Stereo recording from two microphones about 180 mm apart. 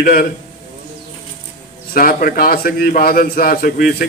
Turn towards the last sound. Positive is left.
turn(degrees=55)  # may be behind; listen again after turning